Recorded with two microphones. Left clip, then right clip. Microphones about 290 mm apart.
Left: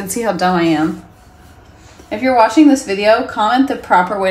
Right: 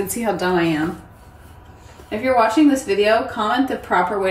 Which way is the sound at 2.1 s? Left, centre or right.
Left.